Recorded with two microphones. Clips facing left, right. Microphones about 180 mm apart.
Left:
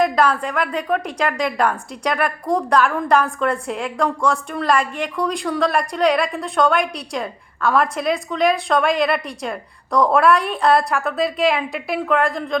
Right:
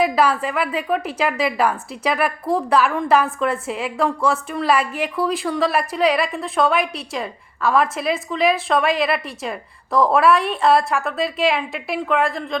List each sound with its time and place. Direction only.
0.0 s a woman's voice: 5° right (ahead or behind)